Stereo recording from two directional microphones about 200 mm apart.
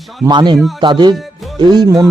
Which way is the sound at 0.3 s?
20° right (ahead or behind).